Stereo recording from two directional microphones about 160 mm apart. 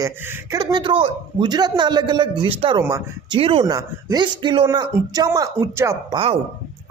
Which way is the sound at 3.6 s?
25° right (ahead or behind).